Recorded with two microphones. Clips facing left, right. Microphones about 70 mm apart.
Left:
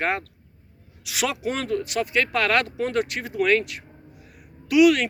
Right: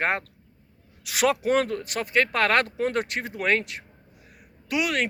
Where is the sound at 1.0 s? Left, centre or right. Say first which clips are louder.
Right 3 dB; right.